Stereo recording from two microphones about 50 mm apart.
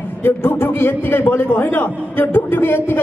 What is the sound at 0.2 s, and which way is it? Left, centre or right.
A man's voice, left.